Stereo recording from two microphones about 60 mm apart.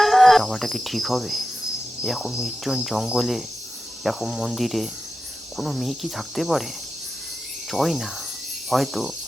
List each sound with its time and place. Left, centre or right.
0.0 s cricket: centre
7.7 s cricket: centre